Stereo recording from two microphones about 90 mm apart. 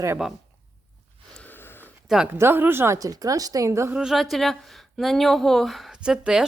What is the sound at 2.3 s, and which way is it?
Speech, 25° right (ahead or behind).